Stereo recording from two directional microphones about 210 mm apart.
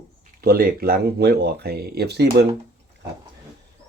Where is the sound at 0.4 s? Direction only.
45° right (ahead or behind).